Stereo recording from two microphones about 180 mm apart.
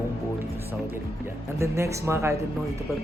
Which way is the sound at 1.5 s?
15° right (ahead or behind).